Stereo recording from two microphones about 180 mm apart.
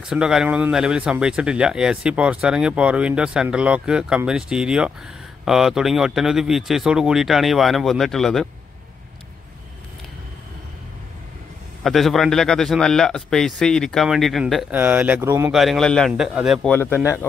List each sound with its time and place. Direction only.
0.0 s speech: 5° right (ahead or behind)
11.8 s speech: centre (ahead or behind)
15.5 s speech: centre (ahead or behind)
16.7 s speech: 10° left (ahead or behind)